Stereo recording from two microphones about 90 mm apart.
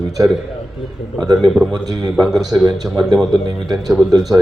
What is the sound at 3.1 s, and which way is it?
Speech, 50° right (ahead or behind).